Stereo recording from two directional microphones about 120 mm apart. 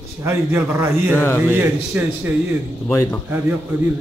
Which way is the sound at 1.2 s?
15° left (ahead or behind).